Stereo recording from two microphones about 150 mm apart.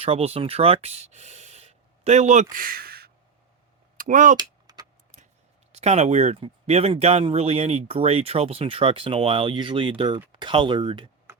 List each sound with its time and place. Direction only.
0.0 s speech: 40° right (ahead or behind); by 3.1 s 85° right
3.9 s speech: 60° right (ahead or behind)
4.4 s typing: 25° right (ahead or behind)
5.7 s speech: 45° right (ahead or behind)